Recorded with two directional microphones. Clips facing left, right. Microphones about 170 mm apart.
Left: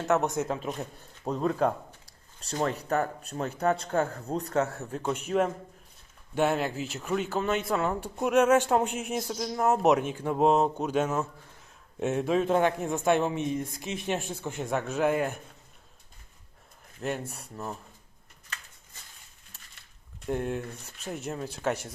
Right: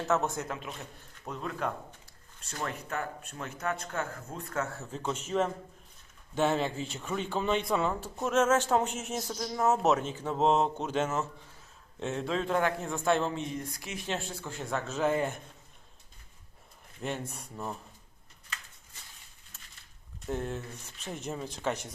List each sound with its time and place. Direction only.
0.1 s speech: 20° left (ahead or behind)
0.4 s speech: 35° left (ahead or behind)
4.5 s speech: 25° left (ahead or behind)
4.9 s speech: 10° left (ahead or behind)
8.0 s speech: 15° left (ahead or behind)
17.0 s speech: 5° left (ahead or behind)
20.2 s speech: 10° left (ahead or behind)